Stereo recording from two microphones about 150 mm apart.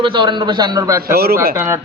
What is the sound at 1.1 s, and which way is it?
Speech, 90° right.